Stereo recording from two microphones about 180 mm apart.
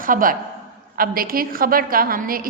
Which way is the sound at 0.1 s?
50° right (ahead or behind).